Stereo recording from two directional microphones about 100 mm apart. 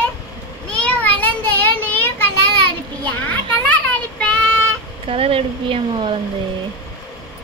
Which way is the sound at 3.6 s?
15° left (ahead or behind).